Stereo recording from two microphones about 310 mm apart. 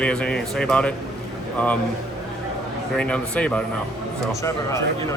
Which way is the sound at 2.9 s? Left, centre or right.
Centre.